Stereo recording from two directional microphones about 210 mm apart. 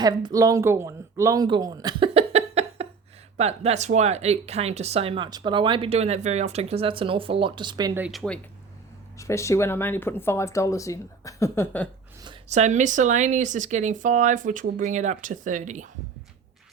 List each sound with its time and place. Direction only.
0.0 s speech: 20° right (ahead or behind)
8.0 s speech: centre (ahead or behind)
9.1 s speech: 15° left (ahead or behind)
12.5 s speech: 35° right (ahead or behind)